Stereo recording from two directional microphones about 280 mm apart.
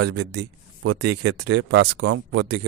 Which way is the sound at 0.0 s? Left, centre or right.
Right.